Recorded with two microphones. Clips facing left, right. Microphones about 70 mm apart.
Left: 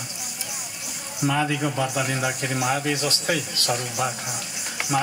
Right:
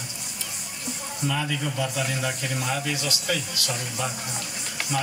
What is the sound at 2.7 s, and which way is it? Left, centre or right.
Speech, left.